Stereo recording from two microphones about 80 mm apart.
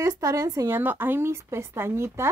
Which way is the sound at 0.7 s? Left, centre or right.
Right.